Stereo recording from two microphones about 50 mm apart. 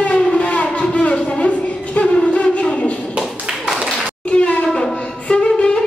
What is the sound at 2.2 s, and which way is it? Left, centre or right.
Wind instrument, left.